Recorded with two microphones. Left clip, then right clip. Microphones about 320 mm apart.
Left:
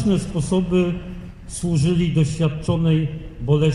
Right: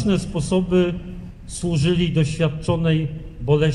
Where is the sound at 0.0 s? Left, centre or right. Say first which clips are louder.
Even; right.